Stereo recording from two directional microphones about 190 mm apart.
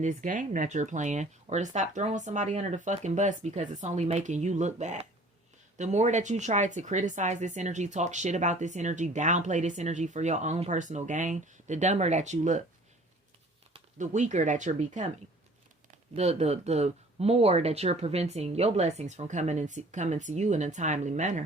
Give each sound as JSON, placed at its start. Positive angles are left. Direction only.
{"t": 0.0, "sound": "speech", "side_deg": -45}
{"t": 13.7, "sound": "speech", "side_deg": -40}